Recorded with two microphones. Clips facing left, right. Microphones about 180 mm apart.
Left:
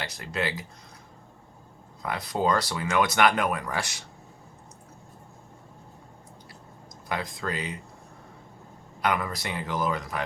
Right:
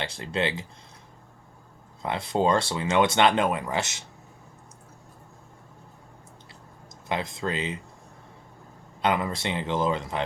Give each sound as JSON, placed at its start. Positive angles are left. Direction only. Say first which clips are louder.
{"t": 0.0, "sound": "speech", "louder": "right 3 dB", "side_deg": -25}
{"t": 2.0, "sound": "speech", "louder": "right 3 dB", "side_deg": -25}
{"t": 7.1, "sound": "speech", "louder": "right 2 dB", "side_deg": -25}
{"t": 9.0, "sound": "speech", "louder": "right 2 dB", "side_deg": -25}